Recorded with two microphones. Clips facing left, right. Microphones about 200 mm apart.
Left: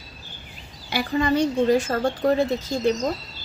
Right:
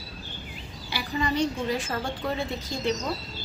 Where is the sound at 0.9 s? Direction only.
50° left (ahead or behind).